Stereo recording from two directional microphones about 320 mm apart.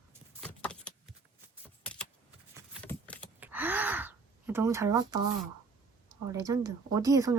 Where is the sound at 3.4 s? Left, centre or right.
Centre.